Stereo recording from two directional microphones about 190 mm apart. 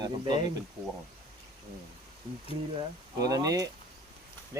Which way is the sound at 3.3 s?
20° right (ahead or behind).